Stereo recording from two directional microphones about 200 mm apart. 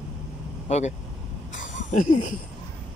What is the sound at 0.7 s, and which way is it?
Speech, 35° left (ahead or behind).